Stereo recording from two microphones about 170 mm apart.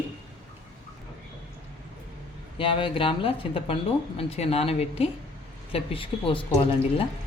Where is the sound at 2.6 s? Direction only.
30° left (ahead or behind).